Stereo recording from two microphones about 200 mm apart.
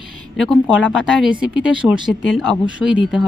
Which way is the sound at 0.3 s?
5° left (ahead or behind).